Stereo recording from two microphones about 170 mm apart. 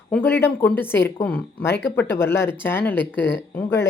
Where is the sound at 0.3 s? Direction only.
10° left (ahead or behind).